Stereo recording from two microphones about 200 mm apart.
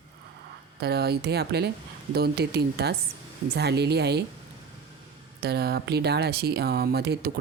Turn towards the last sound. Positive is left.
turn(degrees=-55)  # may be behind; listen again after turning